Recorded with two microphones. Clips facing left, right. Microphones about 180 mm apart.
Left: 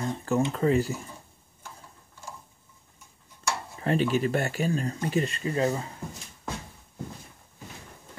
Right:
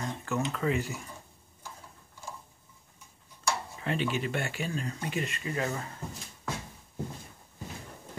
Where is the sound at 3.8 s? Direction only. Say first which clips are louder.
Left 7 dB; 40° left (ahead or behind).